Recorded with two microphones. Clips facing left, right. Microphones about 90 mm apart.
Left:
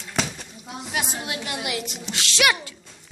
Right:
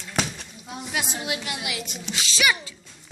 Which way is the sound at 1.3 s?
45° left (ahead or behind).